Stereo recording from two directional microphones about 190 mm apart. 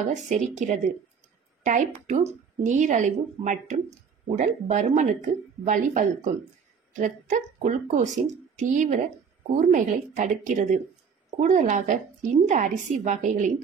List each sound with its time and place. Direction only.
0.0 s a woman's voice: 40° right (ahead or behind)